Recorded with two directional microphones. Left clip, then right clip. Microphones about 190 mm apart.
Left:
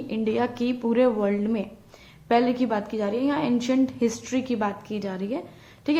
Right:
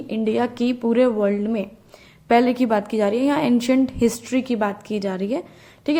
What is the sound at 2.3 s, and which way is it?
A woman's voice, 30° right (ahead or behind).